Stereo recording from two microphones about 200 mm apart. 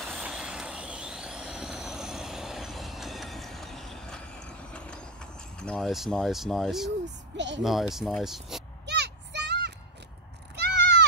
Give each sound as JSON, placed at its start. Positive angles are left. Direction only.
{"t": 0.0, "sound": "vehicle", "side_deg": 0}
{"t": 7.3, "sound": "speech", "side_deg": -60}
{"t": 7.6, "sound": "speech", "side_deg": 0}
{"t": 8.8, "sound": "a sound", "side_deg": -55}
{"t": 10.5, "sound": "sheep", "side_deg": -55}